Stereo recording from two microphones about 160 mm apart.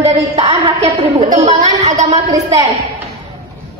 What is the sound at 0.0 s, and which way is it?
Speech, 35° right (ahead or behind).